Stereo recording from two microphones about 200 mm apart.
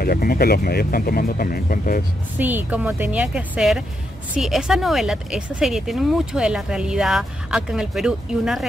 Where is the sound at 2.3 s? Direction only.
10° right (ahead or behind).